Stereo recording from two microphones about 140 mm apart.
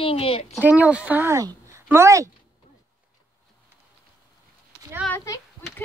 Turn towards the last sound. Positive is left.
turn(degrees=20)  # may be behind; listen again after turning